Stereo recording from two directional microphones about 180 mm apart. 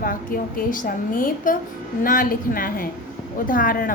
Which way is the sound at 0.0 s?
50° left (ahead or behind).